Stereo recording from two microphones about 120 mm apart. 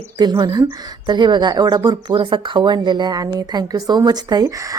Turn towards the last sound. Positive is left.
turn(degrees=-35)  # may be behind; listen again after turning